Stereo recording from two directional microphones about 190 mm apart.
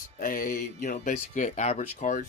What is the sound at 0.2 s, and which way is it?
Speech, 45° left (ahead or behind).